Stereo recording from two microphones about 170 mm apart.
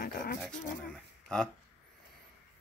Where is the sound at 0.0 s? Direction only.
60° left (ahead or behind).